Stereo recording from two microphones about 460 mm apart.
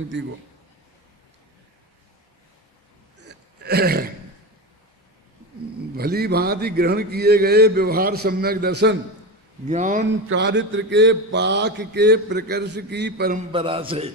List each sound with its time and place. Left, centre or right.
0.1 s mantra: right
3.2 s a sound: right
5.9 s mantra: centre